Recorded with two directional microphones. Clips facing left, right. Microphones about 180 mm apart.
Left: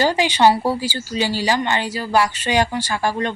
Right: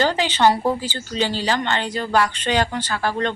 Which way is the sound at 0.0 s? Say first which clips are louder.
Left 2 dB; 10° left (ahead or behind).